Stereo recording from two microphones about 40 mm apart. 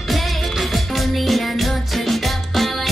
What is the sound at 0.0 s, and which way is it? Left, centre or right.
Music, centre.